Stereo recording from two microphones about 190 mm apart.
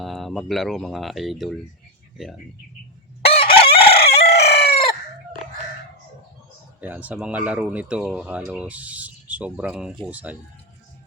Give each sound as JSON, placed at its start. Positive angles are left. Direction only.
{"t": 0.0, "sound": "speech", "side_deg": 0}
{"t": 3.2, "sound": "chicken", "side_deg": 30}
{"t": 6.8, "sound": "speech", "side_deg": -10}